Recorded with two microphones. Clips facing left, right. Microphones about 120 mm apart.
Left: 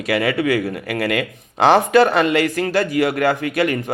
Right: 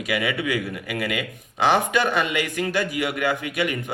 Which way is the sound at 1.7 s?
35° left (ahead or behind).